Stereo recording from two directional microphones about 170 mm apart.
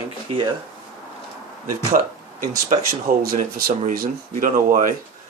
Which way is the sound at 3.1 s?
55° right (ahead or behind).